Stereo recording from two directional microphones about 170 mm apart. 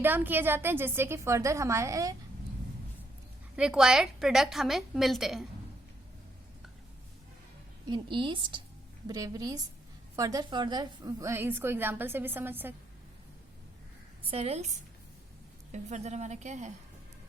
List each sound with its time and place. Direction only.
0.0 s a woman's voice: 10° right (ahead or behind)
3.5 s a woman's voice: 5° right (ahead or behind)
7.9 s a woman's voice: 30° right (ahead or behind); by 12.7 s 10° right (ahead or behind)
14.3 s a woman's voice: 35° right (ahead or behind)
15.7 s a woman's voice: 45° right (ahead or behind)